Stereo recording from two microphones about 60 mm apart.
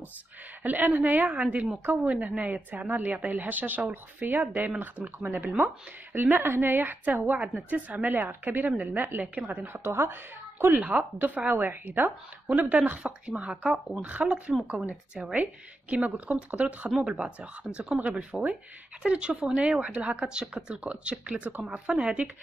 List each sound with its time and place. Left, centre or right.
0.6 s a woman's voice: right
9.8 s speech: right
10.8 s a woman's voice: right